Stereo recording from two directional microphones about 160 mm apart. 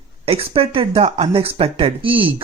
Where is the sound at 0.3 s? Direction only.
40° right (ahead or behind).